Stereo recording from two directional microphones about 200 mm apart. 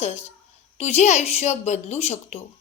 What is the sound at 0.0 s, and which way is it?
A woman's voice, 35° left (ahead or behind).